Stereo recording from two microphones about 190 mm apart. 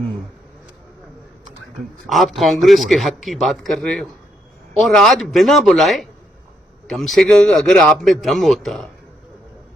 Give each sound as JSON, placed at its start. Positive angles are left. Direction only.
{"t": 2.0, "sound": "a man's voice", "side_deg": 0}
{"t": 7.1, "sound": "a man's voice", "side_deg": 5}